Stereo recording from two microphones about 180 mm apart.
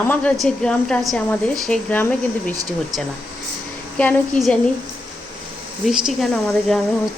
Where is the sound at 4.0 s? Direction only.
10° left (ahead or behind).